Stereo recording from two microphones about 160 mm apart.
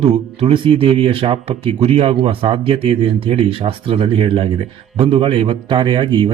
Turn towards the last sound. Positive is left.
turn(degrees=-30)  # may be behind; listen again after turning